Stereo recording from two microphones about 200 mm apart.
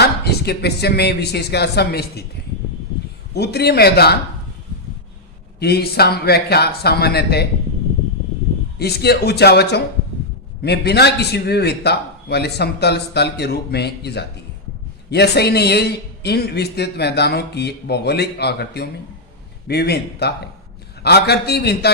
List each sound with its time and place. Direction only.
0.0 s speech: 55° left (ahead or behind)
3.3 s speech: 55° left (ahead or behind)
5.5 s speech: 55° left (ahead or behind)
8.8 s a man's voice: 55° left (ahead or behind)